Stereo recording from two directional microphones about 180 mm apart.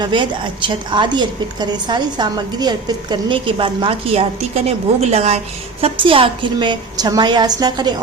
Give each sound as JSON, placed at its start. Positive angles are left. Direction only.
{"t": 0.0, "sound": "a woman's voice", "side_deg": -25}